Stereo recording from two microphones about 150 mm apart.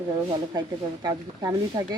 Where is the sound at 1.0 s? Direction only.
25° right (ahead or behind).